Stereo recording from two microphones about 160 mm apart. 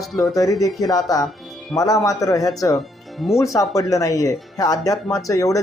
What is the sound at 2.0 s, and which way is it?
Speech, 20° left (ahead or behind).